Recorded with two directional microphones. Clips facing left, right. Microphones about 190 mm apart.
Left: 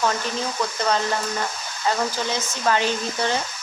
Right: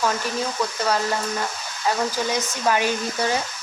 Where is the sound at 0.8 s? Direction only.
5° right (ahead or behind).